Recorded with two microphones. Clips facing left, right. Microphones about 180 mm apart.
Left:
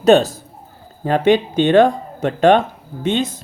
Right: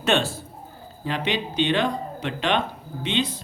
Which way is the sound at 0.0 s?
40° left (ahead or behind).